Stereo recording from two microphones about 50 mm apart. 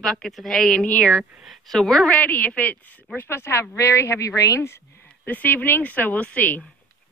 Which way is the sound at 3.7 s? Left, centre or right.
Left.